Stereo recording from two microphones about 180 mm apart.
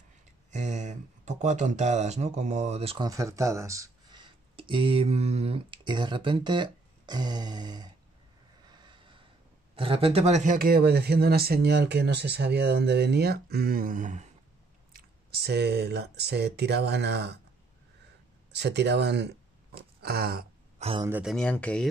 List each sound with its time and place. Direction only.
0.5 s speech: 40° right (ahead or behind)
3.1 s speech: 15° right (ahead or behind)
8.6 s vehicle: 25° right (ahead or behind)
9.8 s speech: 30° right (ahead or behind)
14.9 s speech: 60° right (ahead or behind)
18.5 s speech: 70° right (ahead or behind)
20.0 s a sound: 60° right (ahead or behind)
20.8 s speech: 40° right (ahead or behind)
21.2 s speech: centre (ahead or behind)